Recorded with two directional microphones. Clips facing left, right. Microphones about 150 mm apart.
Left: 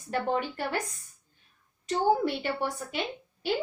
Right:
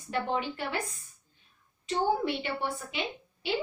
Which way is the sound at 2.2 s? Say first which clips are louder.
Left 2 dB; 45° left (ahead or behind).